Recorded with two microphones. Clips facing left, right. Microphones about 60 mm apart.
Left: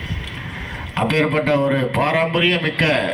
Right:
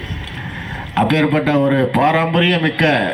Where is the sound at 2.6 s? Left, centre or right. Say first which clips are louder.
Right 3 dB; right.